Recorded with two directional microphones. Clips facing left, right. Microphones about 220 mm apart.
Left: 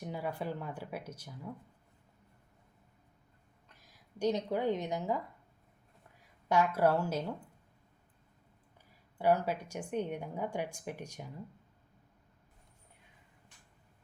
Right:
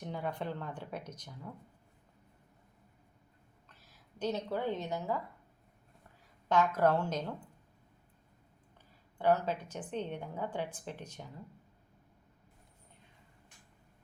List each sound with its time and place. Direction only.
0.0 s a woman's voice: 10° left (ahead or behind)
3.7 s speech: 15° left (ahead or behind)
6.5 s a woman's voice: 10° left (ahead or behind)
9.1 s a woman's voice: 10° left (ahead or behind)